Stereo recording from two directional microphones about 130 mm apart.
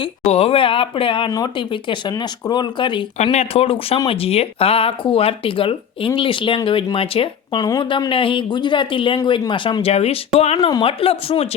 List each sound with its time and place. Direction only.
0.0 s speech: 50° left (ahead or behind)
3.3 s speech: 50° left (ahead or behind)
7.6 s speech: 35° left (ahead or behind); by 10.6 s 55° left (ahead or behind)
10.6 s speech: 30° left (ahead or behind)
10.8 s speech: 45° left (ahead or behind)